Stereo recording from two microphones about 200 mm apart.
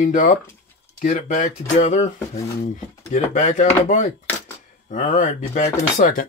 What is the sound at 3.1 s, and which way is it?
Speech, 40° left (ahead or behind).